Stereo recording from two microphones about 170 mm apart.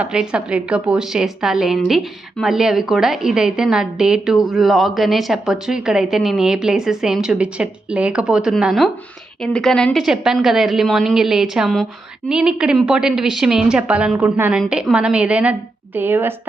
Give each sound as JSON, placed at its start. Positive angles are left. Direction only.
{"t": 0.0, "sound": "a woman's voice", "side_deg": -5}